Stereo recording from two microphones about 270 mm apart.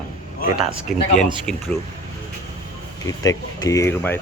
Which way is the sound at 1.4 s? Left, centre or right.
Centre.